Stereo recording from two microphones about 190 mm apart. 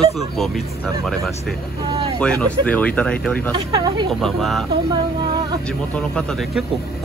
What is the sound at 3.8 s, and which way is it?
Speech, 25° right (ahead or behind).